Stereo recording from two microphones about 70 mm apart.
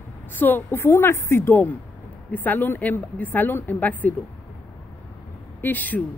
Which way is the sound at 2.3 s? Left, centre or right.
Left.